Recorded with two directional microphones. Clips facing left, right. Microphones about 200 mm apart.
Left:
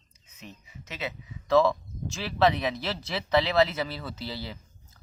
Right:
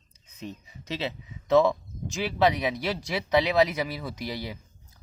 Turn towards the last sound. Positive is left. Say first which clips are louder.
# right 2 dB
turn(degrees=-15)  # may be behind; listen again after turning